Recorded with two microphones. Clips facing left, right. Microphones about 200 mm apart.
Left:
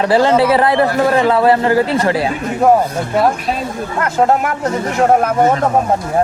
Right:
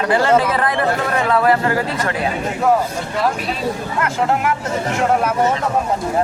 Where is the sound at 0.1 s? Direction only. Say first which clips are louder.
Left 3 dB; 30° left (ahead or behind).